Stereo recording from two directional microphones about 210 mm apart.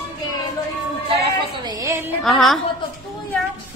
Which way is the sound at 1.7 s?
15° right (ahead or behind).